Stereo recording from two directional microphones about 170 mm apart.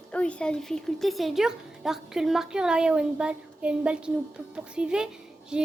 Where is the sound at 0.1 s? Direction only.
5° left (ahead or behind).